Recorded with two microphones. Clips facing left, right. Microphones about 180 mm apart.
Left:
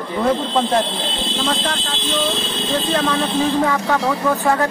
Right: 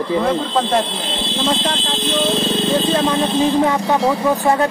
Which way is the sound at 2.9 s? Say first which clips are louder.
Right 2 dB; 15° right (ahead or behind).